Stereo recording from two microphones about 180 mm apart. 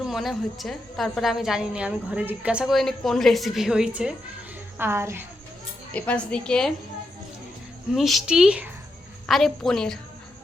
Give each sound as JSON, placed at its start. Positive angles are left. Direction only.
{"t": 0.0, "sound": "a woman's voice", "side_deg": 0}
{"t": 5.9, "sound": "a woman's voice", "side_deg": 5}
{"t": 7.9, "sound": "a woman's voice", "side_deg": 0}